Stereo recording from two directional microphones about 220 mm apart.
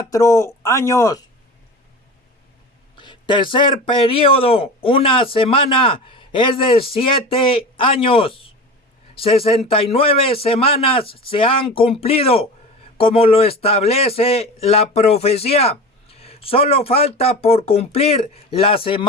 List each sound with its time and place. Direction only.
0.1 s speech: 15° left (ahead or behind)
2.9 s a man's voice: 20° left (ahead or behind)